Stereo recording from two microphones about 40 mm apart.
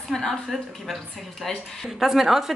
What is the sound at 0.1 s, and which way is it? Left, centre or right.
Speech, centre.